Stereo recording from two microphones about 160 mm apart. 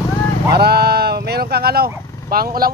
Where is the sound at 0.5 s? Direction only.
80° right.